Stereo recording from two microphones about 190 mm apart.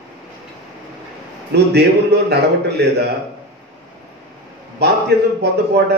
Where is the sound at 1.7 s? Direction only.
60° right (ahead or behind).